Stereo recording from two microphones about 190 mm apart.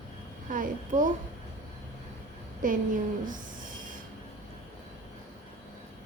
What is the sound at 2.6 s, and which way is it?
Speech, 45° right (ahead or behind).